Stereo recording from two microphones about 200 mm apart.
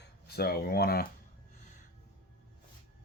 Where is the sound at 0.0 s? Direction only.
50° left (ahead or behind).